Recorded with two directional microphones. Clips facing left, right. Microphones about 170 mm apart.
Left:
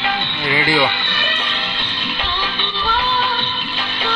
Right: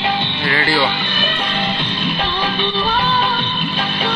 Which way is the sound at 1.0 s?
10° right (ahead or behind).